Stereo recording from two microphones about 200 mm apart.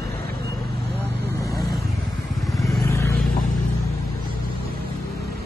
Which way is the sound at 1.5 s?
Centre (ahead or behind).